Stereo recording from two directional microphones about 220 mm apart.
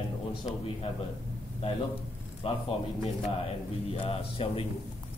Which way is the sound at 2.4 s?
25° left (ahead or behind).